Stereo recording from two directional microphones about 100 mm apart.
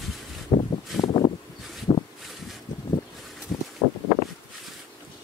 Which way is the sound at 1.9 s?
50° left (ahead or behind).